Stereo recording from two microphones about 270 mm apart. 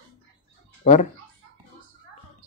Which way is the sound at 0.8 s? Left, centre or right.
Left.